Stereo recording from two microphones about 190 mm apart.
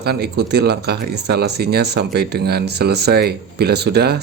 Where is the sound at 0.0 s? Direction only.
60° right (ahead or behind).